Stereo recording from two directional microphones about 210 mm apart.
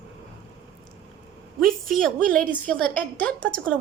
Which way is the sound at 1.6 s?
Centre (ahead or behind).